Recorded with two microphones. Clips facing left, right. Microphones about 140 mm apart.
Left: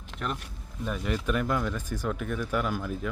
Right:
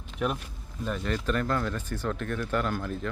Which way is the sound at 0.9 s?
5° left (ahead or behind).